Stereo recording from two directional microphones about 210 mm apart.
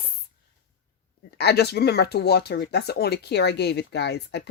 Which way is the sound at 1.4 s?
50° left (ahead or behind).